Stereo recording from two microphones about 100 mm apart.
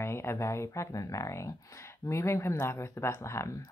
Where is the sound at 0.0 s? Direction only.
25° left (ahead or behind).